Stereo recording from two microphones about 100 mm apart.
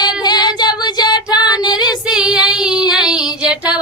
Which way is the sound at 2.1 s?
5° right (ahead or behind).